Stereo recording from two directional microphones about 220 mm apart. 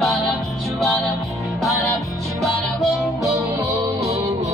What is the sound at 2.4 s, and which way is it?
Music, centre (ahead or behind).